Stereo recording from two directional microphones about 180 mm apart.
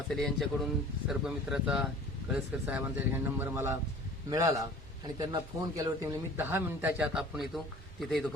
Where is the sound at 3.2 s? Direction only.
15° right (ahead or behind).